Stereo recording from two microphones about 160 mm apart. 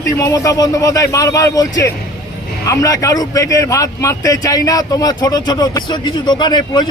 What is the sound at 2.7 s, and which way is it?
A man's voice, 20° left (ahead or behind).